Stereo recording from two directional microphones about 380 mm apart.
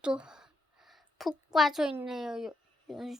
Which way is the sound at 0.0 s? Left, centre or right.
Centre.